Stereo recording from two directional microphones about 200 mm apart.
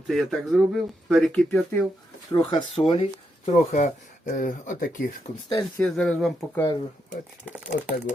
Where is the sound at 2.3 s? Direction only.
25° left (ahead or behind); by 5.0 s 40° left (ahead or behind).